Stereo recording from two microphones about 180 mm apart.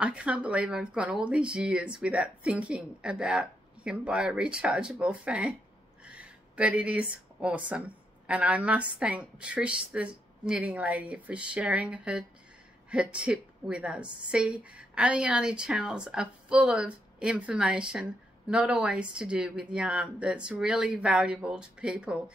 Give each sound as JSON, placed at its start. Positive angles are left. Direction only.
{"t": 0.0, "sound": "a woman's voice", "side_deg": -5}